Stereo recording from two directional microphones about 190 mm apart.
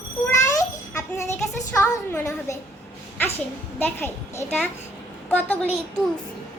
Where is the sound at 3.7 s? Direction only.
10° left (ahead or behind).